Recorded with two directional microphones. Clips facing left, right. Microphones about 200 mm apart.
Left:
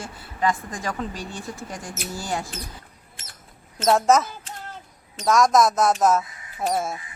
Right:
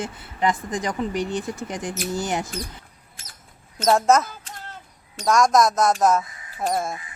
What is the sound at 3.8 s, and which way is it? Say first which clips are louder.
Speech: even; 5° left (ahead or behind).